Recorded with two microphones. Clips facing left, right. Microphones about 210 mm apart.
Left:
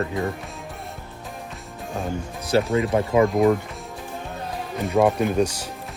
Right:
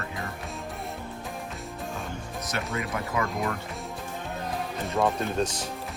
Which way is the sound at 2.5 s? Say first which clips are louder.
Left 12 dB; 30° left (ahead or behind).